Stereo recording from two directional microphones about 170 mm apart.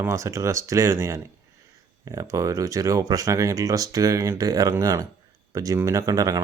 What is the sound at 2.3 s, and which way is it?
Speech, 20° right (ahead or behind).